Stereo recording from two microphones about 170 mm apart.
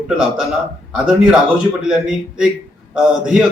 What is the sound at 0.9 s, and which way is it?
A man's voice, 5° right (ahead or behind).